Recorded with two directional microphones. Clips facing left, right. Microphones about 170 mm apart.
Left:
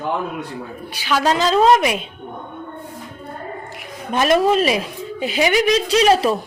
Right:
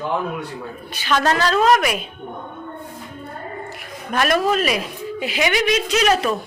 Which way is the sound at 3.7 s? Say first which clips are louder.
Left 2 dB; 20° left (ahead or behind).